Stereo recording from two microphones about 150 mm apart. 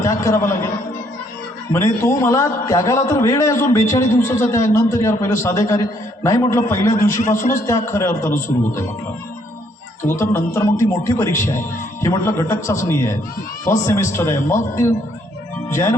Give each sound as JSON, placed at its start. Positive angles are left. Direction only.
{"t": 0.0, "sound": "a man's voice", "side_deg": 20}
{"t": 1.7, "sound": "a man's voice", "side_deg": 15}
{"t": 7.2, "sound": "a man's voice", "side_deg": 55}
{"t": 7.7, "sound": "a man's voice", "side_deg": 20}
{"t": 10.2, "sound": "a man's voice", "side_deg": 20}